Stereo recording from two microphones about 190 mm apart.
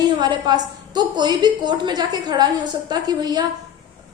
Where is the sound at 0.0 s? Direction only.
20° right (ahead or behind).